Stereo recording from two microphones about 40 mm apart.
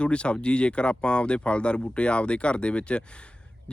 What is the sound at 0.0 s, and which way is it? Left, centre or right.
Speech, left.